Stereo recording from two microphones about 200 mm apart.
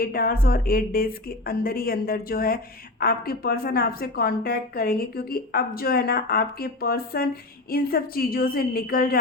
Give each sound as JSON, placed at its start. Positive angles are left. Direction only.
{"t": 0.0, "sound": "speech", "side_deg": 45}